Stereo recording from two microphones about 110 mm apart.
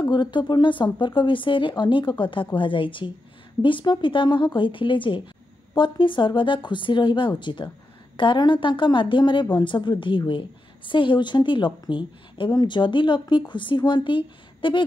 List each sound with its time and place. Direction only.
0.1 s speech: 45° left (ahead or behind)